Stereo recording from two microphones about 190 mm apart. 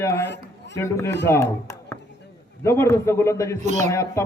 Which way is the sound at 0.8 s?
15° left (ahead or behind).